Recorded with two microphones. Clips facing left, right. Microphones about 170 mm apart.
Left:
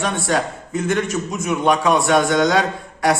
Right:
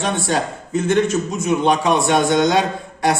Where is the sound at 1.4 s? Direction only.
25° right (ahead or behind).